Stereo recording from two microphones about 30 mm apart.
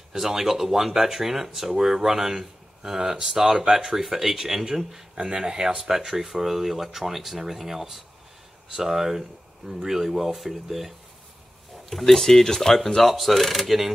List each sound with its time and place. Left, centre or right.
0.1 s speech: centre
5.1 s speech: right
5.8 s speech: centre
8.6 s speech: right; by 10.9 s centre
12.1 s speech: centre